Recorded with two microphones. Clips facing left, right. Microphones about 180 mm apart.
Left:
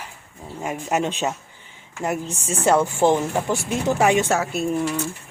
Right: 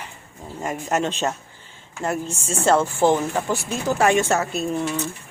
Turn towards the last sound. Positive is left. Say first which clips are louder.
# left 1 dB
turn(degrees=10)  # may be behind; listen again after turning